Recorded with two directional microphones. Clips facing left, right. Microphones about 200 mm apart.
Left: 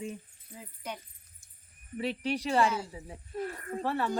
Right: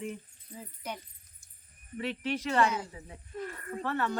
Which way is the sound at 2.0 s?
40° left (ahead or behind).